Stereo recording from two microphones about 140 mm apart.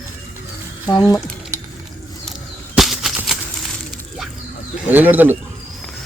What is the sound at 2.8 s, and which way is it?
Typewriter, centre (ahead or behind).